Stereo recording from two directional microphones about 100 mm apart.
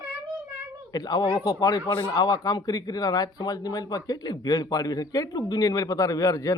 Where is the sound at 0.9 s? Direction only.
40° left (ahead or behind).